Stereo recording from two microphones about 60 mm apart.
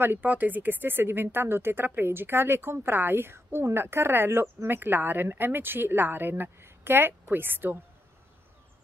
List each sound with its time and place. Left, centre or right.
0.0 s a woman's voice: right